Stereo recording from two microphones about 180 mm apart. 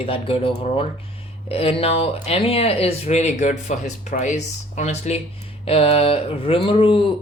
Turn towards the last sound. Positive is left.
turn(degrees=30)  # may be behind; listen again after turning